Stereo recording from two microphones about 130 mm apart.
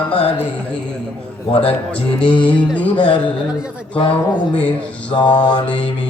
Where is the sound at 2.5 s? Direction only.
10° left (ahead or behind).